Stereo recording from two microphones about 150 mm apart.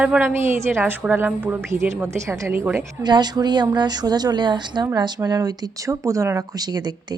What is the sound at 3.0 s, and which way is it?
Speech, 30° right (ahead or behind).